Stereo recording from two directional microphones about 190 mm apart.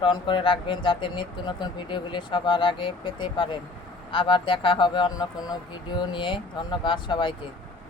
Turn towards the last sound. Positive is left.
turn(degrees=25)  # may be behind; listen again after turning